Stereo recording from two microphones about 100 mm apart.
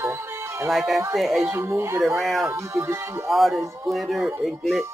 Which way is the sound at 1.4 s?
25° right (ahead or behind).